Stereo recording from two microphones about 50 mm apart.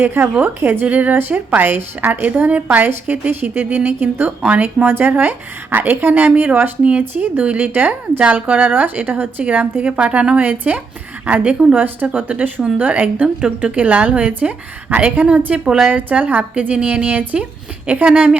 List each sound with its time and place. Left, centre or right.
0.0 s a woman's voice: right
0.9 s a woman's voice: right
8.4 s a woman's voice: right
9.9 s a woman's voice: right
10.4 s a woman's voice: right
13.2 s a woman's voice: right
15.9 s a woman's voice: right